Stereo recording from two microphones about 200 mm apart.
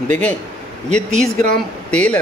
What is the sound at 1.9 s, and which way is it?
Speech, 5° left (ahead or behind).